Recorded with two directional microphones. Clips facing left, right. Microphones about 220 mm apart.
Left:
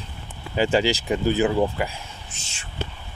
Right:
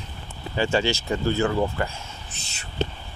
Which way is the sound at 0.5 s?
15° left (ahead or behind).